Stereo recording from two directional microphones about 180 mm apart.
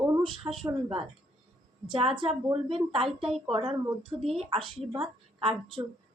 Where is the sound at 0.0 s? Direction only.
20° right (ahead or behind).